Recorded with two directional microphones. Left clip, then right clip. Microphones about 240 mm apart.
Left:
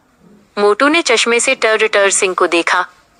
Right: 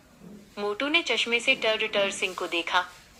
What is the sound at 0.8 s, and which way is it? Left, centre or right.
Speech, left.